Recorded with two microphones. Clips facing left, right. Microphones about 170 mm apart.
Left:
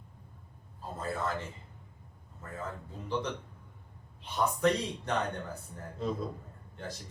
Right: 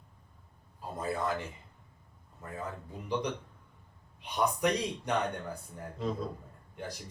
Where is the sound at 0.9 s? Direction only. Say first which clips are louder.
Right 2 dB; 15° right (ahead or behind).